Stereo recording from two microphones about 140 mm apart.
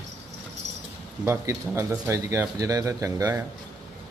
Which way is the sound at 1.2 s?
20° right (ahead or behind).